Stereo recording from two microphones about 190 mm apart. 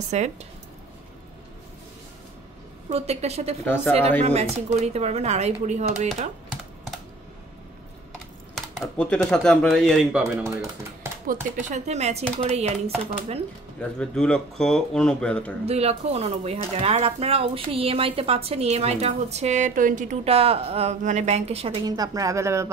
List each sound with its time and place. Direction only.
0.1 s speech: 35° right (ahead or behind)
2.9 s speech: 35° right (ahead or behind)
3.6 s speech: 10° left (ahead or behind)
4.2 s speech: 35° right (ahead or behind)
8.5 s speech: 5° left (ahead or behind)
11.6 s speech: 40° right (ahead or behind)
13.7 s speech: 5° left (ahead or behind)
15.6 s speech: 35° right (ahead or behind)
21.8 s speech: 20° right (ahead or behind)